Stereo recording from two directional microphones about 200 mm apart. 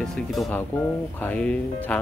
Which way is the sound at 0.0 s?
Centre (ahead or behind).